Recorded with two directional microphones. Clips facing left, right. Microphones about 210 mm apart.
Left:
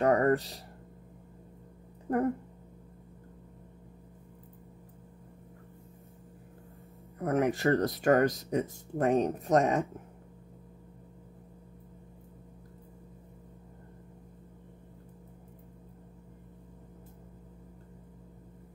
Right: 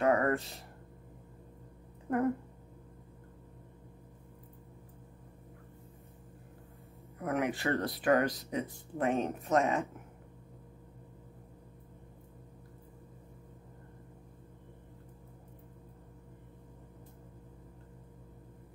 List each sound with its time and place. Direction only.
0.0 s a sound: 35° left (ahead or behind)
2.1 s speech: 35° left (ahead or behind)
7.2 s speech: 45° left (ahead or behind)